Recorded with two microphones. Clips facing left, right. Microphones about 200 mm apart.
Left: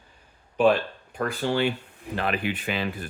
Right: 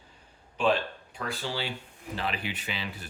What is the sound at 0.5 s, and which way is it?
Speech, 50° left (ahead or behind).